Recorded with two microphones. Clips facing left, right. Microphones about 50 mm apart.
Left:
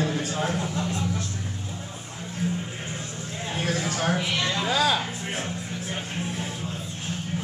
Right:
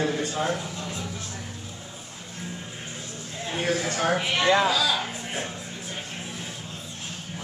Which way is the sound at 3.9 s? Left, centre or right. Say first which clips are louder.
Right 1 dB; centre.